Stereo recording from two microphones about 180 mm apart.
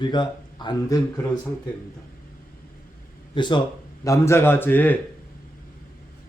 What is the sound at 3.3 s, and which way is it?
A man's voice, 25° left (ahead or behind).